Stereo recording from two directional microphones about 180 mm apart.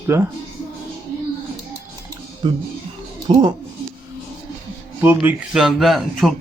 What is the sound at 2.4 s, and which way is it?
Speech, 30° right (ahead or behind).